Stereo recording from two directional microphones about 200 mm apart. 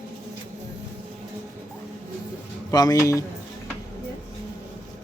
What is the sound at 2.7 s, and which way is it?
Speech, 20° left (ahead or behind).